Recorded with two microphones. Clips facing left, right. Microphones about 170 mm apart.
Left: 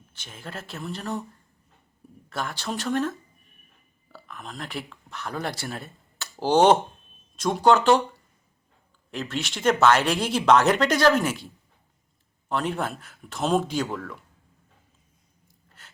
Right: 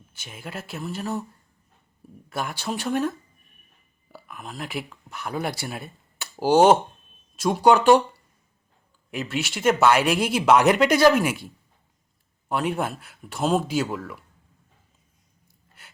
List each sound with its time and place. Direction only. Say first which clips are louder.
0.1 s speech: right 2 dB; 10° right (ahead or behind)
2.3 s speech: right 2 dB; 10° right (ahead or behind)
9.0 s speech: right 2 dB; 10° right (ahead or behind)
15.8 s ratchet: right 1 dB; 10° right (ahead or behind)